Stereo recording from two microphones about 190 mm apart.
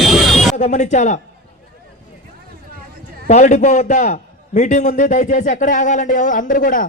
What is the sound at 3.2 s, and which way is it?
A man's voice, 40° left (ahead or behind).